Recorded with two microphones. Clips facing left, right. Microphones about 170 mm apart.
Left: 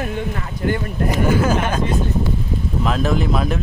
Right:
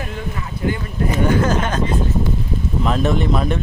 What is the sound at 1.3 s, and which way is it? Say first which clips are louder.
Speech: left 1 dB; 10° left (ahead or behind).